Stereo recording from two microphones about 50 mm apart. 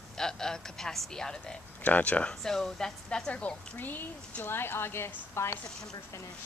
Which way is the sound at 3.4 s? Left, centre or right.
Left.